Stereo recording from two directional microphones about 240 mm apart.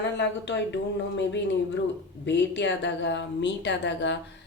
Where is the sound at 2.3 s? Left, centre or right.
Left.